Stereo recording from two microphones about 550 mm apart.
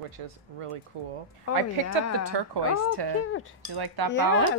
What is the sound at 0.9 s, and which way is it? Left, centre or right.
Speech, right.